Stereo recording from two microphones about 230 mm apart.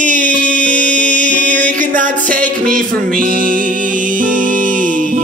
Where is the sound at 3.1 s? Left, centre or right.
Right.